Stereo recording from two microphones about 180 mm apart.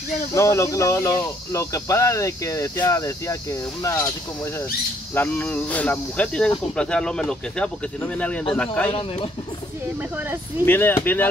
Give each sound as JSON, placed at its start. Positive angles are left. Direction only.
{"t": 0.3, "sound": "speech", "side_deg": 15}
{"t": 5.1, "sound": "speech", "side_deg": 10}
{"t": 10.6, "sound": "speech", "side_deg": 10}